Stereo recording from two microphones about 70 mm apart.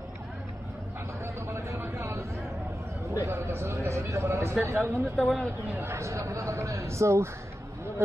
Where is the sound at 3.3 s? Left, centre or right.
Right.